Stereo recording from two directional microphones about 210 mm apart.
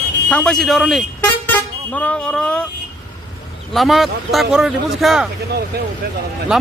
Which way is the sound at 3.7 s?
Centre (ahead or behind).